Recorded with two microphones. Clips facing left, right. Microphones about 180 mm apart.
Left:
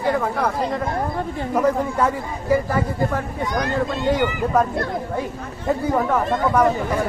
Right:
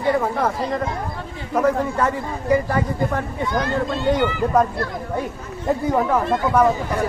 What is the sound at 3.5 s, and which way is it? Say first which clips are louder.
Speech: even; 15° left (ahead or behind).